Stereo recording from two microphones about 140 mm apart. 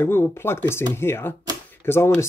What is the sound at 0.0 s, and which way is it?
Speech, 15° left (ahead or behind).